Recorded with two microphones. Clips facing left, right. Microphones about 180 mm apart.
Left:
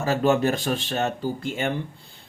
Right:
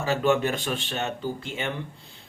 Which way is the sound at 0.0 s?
40° left (ahead or behind).